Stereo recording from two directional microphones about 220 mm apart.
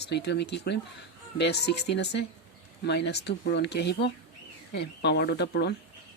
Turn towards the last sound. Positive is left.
turn(degrees=50)  # may be behind; listen again after turning